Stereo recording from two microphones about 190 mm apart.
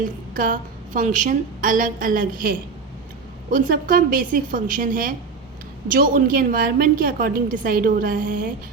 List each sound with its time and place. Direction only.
0.0 s a woman's voice: 45° right (ahead or behind)